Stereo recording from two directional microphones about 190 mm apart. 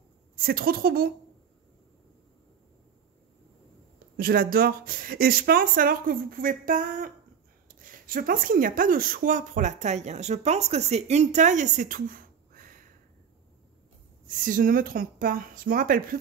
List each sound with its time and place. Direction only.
0.5 s speech: 50° right (ahead or behind)
4.2 s speech: 50° right (ahead or behind)
14.2 s speech: 45° right (ahead or behind)